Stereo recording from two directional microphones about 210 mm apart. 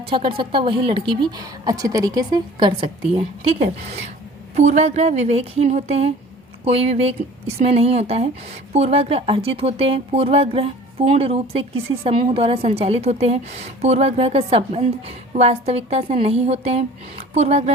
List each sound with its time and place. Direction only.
0.1 s speech: 25° right (ahead or behind)
4.5 s speech: 35° right (ahead or behind)